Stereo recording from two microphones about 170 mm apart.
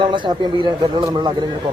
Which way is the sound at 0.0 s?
25° right (ahead or behind).